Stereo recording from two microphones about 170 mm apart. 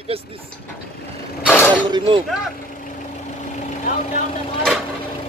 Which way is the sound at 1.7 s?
25° right (ahead or behind).